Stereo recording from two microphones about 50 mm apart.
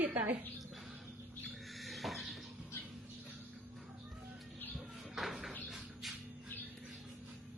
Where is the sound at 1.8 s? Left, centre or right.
Centre.